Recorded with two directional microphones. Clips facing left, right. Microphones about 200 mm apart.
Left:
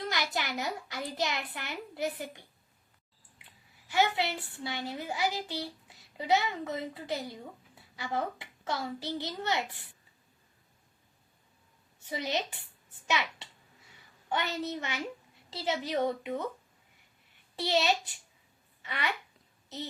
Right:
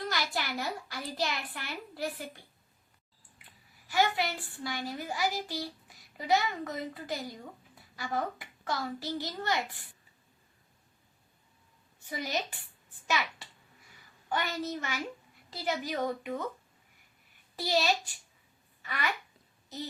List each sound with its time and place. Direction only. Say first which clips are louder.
0.0 s a child's voice: even; 20° left (ahead or behind)
3.9 s a child's voice: even; 20° left (ahead or behind)
12.1 s a child's voice: left 2 dB; 25° left (ahead or behind)
17.6 s a child's voice: left 1 dB; 20° left (ahead or behind)